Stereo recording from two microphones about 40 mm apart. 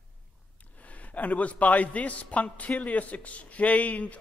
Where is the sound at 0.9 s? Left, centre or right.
Left.